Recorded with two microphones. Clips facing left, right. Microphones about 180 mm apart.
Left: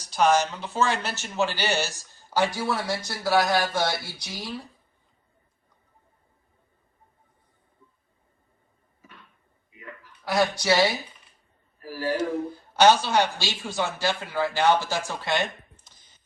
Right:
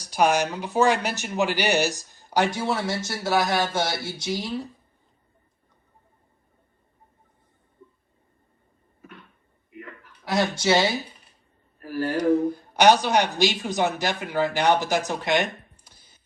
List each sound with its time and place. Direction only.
0.0 s speech: 10° right (ahead or behind)
9.6 s a sound: 60° right (ahead or behind)
10.2 s speech: 25° right (ahead or behind)
11.8 s speech: 60° right (ahead or behind)
12.5 s speech: 15° right (ahead or behind)